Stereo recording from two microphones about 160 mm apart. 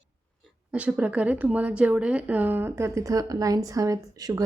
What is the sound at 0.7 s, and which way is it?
Speech, 10° right (ahead or behind).